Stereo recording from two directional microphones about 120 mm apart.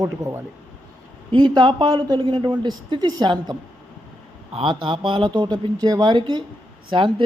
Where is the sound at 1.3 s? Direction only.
45° right (ahead or behind).